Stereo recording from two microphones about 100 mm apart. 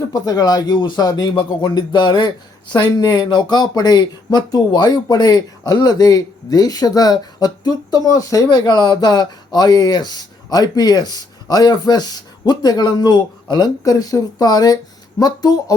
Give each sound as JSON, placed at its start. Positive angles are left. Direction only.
{"t": 0.1, "sound": "speech", "side_deg": 40}